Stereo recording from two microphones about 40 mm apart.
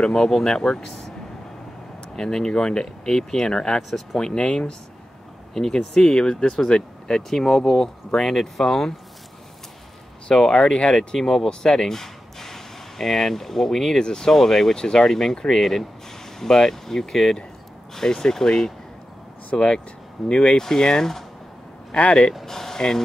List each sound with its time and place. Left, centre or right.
0.0 s speech: centre
2.1 s speech: centre
10.5 s speech: left
22.5 s speech: centre